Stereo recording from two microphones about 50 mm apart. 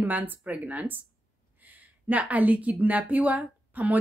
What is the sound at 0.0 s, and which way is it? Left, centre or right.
Speech, right.